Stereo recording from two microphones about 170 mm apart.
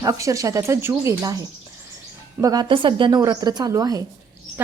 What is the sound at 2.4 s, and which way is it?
A woman's voice, 20° right (ahead or behind).